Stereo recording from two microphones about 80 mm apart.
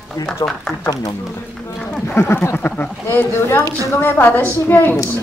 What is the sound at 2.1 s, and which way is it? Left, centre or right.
Speech, left.